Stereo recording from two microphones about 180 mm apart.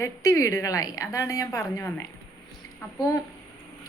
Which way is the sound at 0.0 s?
20° left (ahead or behind).